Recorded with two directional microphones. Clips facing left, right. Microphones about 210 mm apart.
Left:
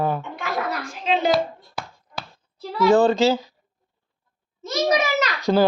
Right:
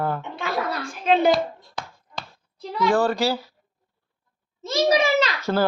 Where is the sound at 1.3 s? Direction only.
5° left (ahead or behind).